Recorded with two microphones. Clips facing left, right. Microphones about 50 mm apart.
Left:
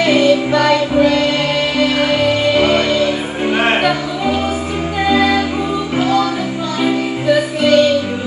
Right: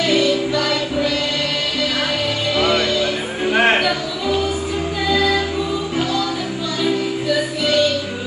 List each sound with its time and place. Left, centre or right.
0.0 s music: left
5.0 s music: left
6.8 s music: left